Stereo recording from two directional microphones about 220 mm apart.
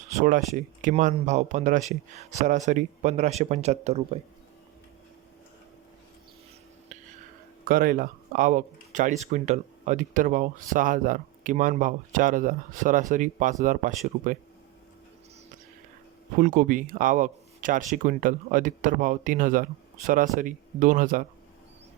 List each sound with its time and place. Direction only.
0.2 s speech: 35° right (ahead or behind)
7.6 s speech: 40° right (ahead or behind)
16.4 s speech: 35° right (ahead or behind)